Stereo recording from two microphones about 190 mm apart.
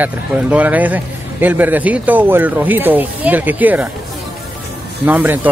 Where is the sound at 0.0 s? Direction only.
10° right (ahead or behind).